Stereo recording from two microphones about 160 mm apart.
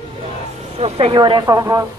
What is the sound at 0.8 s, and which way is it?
Speech, 40° right (ahead or behind).